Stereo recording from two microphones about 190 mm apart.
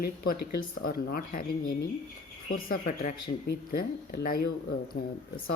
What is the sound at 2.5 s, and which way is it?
Speech, 50° left (ahead or behind).